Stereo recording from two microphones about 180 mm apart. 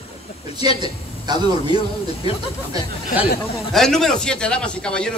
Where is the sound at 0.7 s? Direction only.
25° right (ahead or behind).